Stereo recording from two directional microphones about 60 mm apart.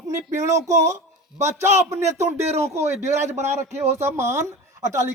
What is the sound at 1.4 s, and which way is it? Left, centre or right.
A man's voice, right.